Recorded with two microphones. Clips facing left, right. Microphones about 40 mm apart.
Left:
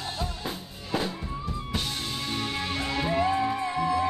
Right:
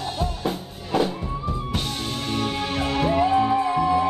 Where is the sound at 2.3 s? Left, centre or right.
Right.